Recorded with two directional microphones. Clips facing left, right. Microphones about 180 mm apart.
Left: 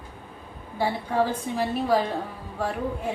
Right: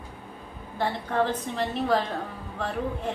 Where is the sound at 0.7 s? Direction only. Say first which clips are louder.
Left 2 dB; 10° left (ahead or behind).